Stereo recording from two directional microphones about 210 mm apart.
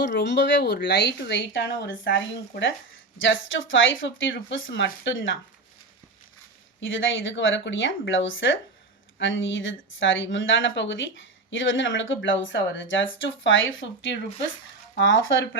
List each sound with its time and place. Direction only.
0.0 s speech: 55° left (ahead or behind)
6.7 s speech: 65° left (ahead or behind)